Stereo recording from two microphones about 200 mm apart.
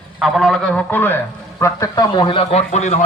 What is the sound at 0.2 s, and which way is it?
A man's voice, centre (ahead or behind).